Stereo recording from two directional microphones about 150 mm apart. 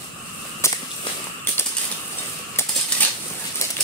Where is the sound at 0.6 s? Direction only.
20° left (ahead or behind).